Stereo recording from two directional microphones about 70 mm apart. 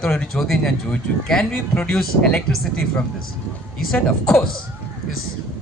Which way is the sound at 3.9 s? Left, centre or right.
Centre.